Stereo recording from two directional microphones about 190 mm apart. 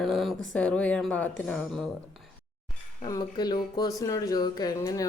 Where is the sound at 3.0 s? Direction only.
20° left (ahead or behind).